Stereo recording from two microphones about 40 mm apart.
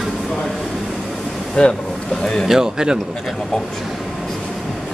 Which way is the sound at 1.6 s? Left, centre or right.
Centre.